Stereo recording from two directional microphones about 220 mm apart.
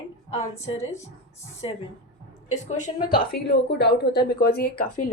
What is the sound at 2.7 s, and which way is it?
Speech, 35° left (ahead or behind).